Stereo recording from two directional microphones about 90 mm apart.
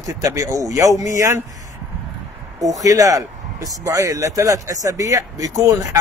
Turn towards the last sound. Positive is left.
turn(degrees=-40)  # may be behind; listen again after turning